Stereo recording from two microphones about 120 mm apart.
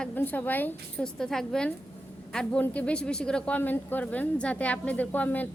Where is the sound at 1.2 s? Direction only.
5° left (ahead or behind).